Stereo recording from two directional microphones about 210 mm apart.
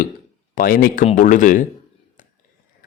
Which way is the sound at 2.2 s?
40° left (ahead or behind).